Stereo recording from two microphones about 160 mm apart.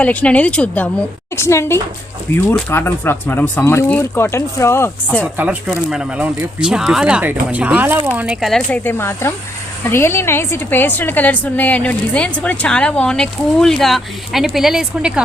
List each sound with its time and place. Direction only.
0.0 s a woman's voice: 10° left (ahead or behind)
5.2 s speech: 10° right (ahead or behind)
8.8 s a woman's voice: 15° left (ahead or behind); by 15.2 s 5° right (ahead or behind)